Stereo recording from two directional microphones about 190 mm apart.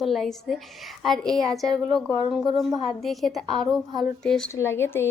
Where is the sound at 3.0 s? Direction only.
Centre (ahead or behind).